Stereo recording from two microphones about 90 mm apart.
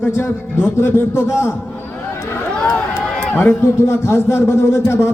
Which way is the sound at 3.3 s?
25° left (ahead or behind).